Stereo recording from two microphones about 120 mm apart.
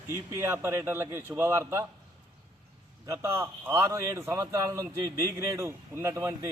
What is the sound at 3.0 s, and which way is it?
A man's voice, 25° right (ahead or behind).